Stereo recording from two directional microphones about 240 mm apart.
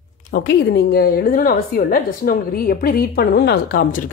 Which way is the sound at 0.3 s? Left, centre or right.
Left.